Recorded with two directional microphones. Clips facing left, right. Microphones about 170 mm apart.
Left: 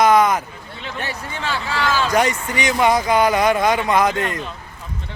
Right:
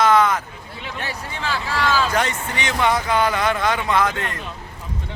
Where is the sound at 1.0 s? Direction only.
Centre (ahead or behind).